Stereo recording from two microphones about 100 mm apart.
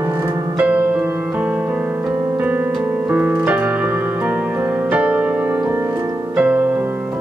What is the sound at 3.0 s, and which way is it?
Music, 15° right (ahead or behind).